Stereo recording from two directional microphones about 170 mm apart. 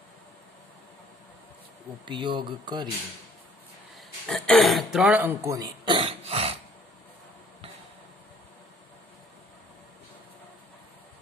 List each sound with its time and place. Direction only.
2.0 s speech: 25° right (ahead or behind)
4.3 s speech: centre (ahead or behind); by 6.6 s 35° right (ahead or behind)